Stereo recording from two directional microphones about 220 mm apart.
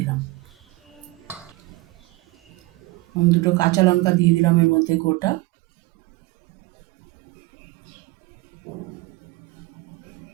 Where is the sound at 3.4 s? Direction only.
15° left (ahead or behind).